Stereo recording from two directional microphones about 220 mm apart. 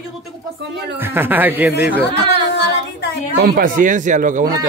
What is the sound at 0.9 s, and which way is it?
Speech, 10° right (ahead or behind).